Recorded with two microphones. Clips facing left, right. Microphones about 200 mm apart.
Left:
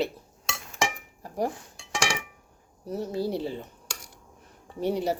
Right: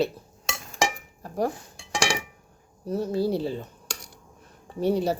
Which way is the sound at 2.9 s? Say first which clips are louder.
Right 4 dB; 20° left (ahead or behind).